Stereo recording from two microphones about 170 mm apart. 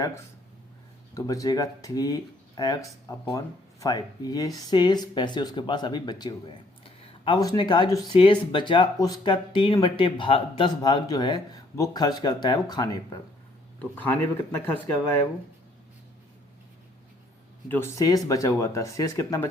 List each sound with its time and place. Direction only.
1.1 s speech: 20° left (ahead or behind)
13.9 s speech: 10° left (ahead or behind)
17.7 s speech: 15° left (ahead or behind)